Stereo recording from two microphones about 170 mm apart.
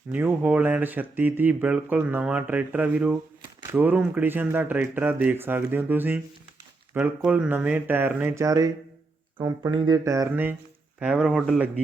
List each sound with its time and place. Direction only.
0.1 s speech: 10° right (ahead or behind)